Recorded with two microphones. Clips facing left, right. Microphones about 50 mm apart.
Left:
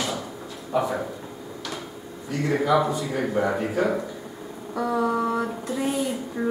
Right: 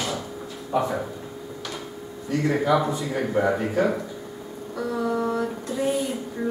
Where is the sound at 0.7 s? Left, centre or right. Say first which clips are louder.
Even; centre.